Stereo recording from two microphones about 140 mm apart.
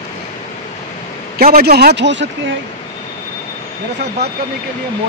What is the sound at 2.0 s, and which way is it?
Speech, 55° right (ahead or behind).